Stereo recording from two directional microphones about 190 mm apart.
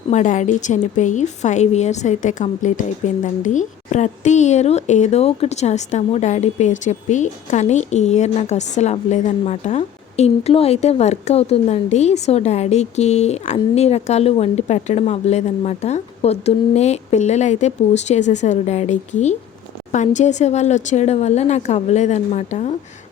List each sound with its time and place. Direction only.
0.1 s a woman's voice: 40° left (ahead or behind)